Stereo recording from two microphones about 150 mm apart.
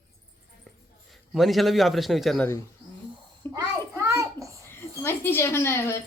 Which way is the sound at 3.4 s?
20° left (ahead or behind).